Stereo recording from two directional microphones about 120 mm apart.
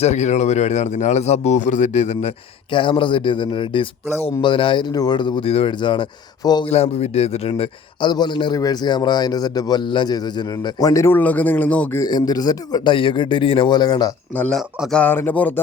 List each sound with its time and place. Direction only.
0.0 s a man's voice: 70° left (ahead or behind)
2.7 s a man's voice: 45° left (ahead or behind)
6.7 s speech: 55° left (ahead or behind)
8.0 s a man's voice: 40° left (ahead or behind); by 11.9 s 10° left (ahead or behind)
11.9 s a man's voice: 35° left (ahead or behind)
14.5 s speech: 5° left (ahead or behind)
15.0 s speech: 15° left (ahead or behind)